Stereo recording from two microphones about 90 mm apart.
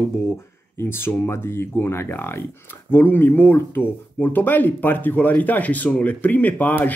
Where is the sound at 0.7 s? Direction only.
25° left (ahead or behind).